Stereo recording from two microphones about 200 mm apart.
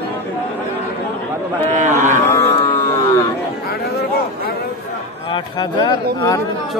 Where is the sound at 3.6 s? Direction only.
50° left (ahead or behind).